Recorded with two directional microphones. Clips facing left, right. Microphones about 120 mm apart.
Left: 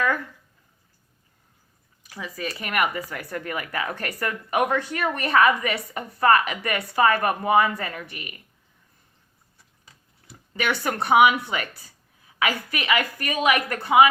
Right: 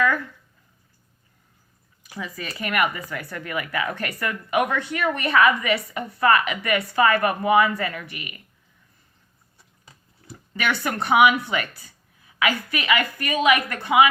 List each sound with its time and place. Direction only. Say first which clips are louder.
2.2 s a woman's voice: even; 35° left (ahead or behind)
10.7 s a woman's voice: left 1 dB; 35° left (ahead or behind)